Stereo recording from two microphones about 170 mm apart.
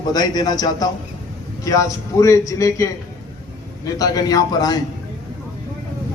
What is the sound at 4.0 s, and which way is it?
Speech, 20° left (ahead or behind).